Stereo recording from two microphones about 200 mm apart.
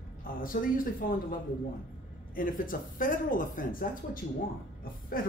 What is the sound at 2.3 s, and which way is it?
Speech, 45° left (ahead or behind).